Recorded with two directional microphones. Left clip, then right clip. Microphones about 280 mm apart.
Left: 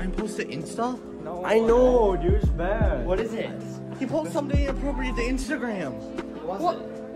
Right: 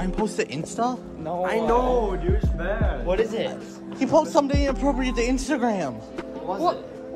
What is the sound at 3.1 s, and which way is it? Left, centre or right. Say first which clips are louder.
Speech: right 5 dB; right.